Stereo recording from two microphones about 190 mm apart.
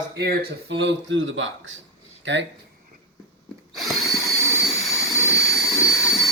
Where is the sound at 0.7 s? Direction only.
70° right (ahead or behind).